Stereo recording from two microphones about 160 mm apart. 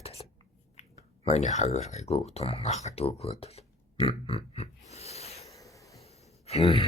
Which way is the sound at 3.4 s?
40° left (ahead or behind).